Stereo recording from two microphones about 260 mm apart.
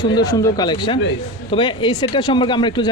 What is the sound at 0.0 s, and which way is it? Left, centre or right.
Speech, centre.